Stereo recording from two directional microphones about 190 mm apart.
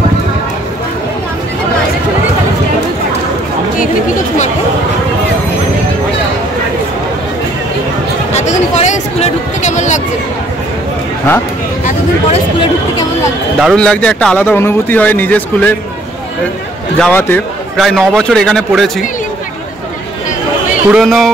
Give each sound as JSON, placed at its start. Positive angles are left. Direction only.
{"t": 8.3, "sound": "a sound", "side_deg": 35}
{"t": 13.6, "sound": "a man's voice", "side_deg": 5}
{"t": 17.0, "sound": "a man's voice", "side_deg": 10}
{"t": 20.9, "sound": "a man's voice", "side_deg": 0}